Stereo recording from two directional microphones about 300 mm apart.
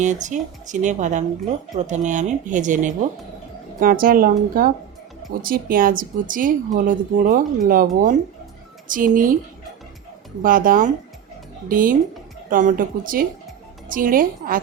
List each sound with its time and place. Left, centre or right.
0.0 s speech: right
10.4 s speech: right